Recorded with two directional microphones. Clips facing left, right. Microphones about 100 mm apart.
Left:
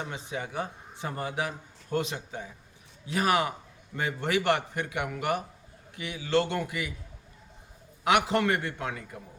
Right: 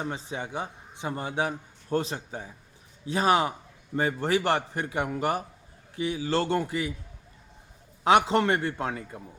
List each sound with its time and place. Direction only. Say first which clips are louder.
0.1 s a man's voice: right 2 dB; 30° right (ahead or behind)
8.0 s a man's voice: right 3 dB; 30° right (ahead or behind)